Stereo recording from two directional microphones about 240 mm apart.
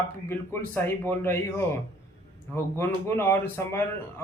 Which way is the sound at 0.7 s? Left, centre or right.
Centre.